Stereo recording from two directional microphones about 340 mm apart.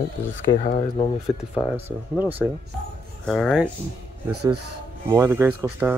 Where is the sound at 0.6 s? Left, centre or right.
Left.